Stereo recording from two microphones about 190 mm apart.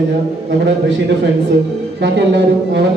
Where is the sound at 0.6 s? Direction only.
70° right (ahead or behind).